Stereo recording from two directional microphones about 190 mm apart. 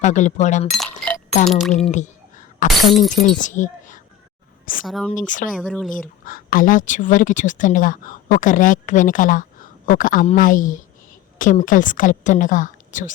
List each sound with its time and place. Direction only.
0.0 s speech: 40° left (ahead or behind)
0.7 s speech: 5° left (ahead or behind)
1.9 s whispering: 40° left (ahead or behind)
2.6 s speech: centre (ahead or behind)
3.3 s speech: 40° left (ahead or behind)
4.9 s speech: centre (ahead or behind)
5.1 s speech: 45° left (ahead or behind)
5.5 s speech: centre (ahead or behind)
6.2 s speech: 45° left (ahead or behind)